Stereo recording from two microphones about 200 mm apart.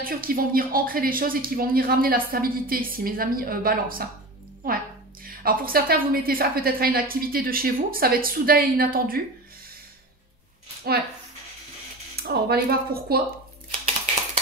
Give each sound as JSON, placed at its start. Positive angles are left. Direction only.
{"t": 0.0, "sound": "speech", "side_deg": -45}
{"t": 10.9, "sound": "speech", "side_deg": -50}
{"t": 12.2, "sound": "speech", "side_deg": -50}